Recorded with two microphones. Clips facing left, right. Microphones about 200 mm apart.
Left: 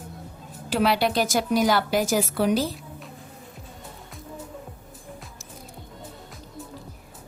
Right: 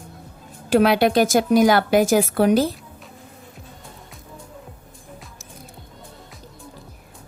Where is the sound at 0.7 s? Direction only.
55° right (ahead or behind).